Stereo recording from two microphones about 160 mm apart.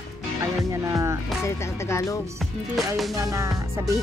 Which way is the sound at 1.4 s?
20° left (ahead or behind).